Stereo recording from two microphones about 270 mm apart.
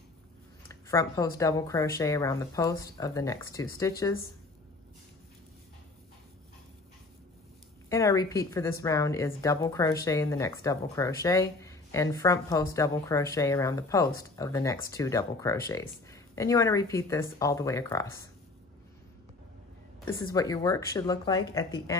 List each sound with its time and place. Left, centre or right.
0.7 s speech: centre
7.9 s speech: centre
20.1 s speech: centre